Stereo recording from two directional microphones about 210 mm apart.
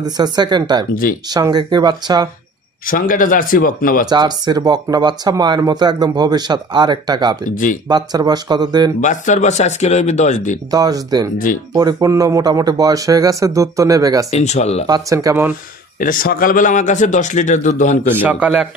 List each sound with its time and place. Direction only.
0.0 s speech: 20° right (ahead or behind)
2.9 s a man's voice: 40° left (ahead or behind)
4.1 s speech: 20° right (ahead or behind)
9.0 s a man's voice: 35° left (ahead or behind)
10.7 s speech: 20° right (ahead or behind)
14.3 s a man's voice: 30° left (ahead or behind)
14.9 s speech: 15° right (ahead or behind)
16.0 s a man's voice: 40° left (ahead or behind)
18.1 s speech: 10° right (ahead or behind)